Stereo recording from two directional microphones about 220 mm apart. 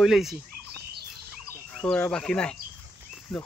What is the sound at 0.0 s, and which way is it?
Speech, centre (ahead or behind).